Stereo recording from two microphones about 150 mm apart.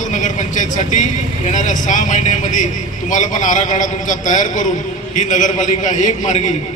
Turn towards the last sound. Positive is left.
turn(degrees=55)  # may be behind; listen again after turning